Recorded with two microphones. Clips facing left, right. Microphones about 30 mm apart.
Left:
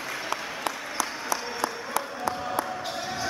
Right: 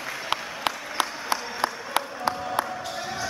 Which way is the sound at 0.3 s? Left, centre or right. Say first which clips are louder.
Right 5 dB; right.